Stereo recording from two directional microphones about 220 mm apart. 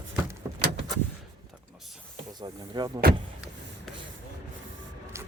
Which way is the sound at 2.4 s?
20° right (ahead or behind).